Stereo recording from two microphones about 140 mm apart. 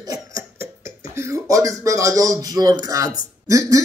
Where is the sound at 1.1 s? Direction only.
20° right (ahead or behind).